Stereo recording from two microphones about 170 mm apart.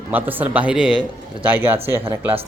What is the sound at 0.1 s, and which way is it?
Speech, 10° right (ahead or behind).